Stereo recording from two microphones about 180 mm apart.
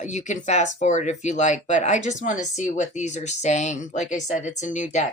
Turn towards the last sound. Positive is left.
turn(degrees=45)  # may be behind; listen again after turning